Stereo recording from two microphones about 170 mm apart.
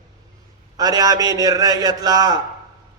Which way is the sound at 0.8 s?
20° right (ahead or behind).